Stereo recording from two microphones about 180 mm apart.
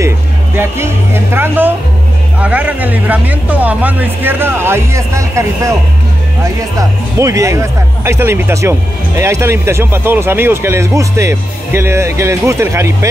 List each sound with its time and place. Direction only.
0.6 s speech: 15° right (ahead or behind)
6.8 s speech: 15° right (ahead or behind)